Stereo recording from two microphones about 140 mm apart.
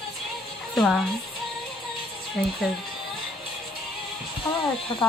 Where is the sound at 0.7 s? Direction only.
5° left (ahead or behind).